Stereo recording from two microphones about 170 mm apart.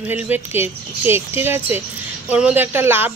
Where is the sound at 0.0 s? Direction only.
10° right (ahead or behind).